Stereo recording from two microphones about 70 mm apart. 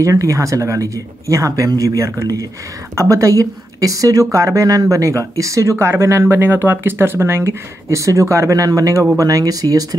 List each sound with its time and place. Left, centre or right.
0.0 s a woman's voice: right